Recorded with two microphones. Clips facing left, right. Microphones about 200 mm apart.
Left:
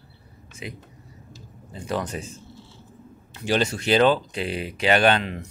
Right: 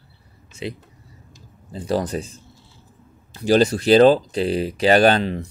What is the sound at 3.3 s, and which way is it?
Speech, 40° right (ahead or behind).